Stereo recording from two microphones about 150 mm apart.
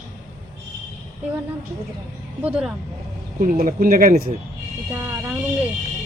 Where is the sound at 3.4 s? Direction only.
65° right (ahead or behind).